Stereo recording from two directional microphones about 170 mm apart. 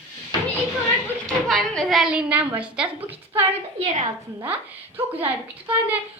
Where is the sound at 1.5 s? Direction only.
Centre (ahead or behind).